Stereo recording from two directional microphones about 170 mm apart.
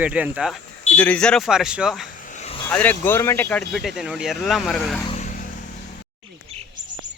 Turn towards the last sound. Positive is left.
turn(degrees=-35)  # may be behind; listen again after turning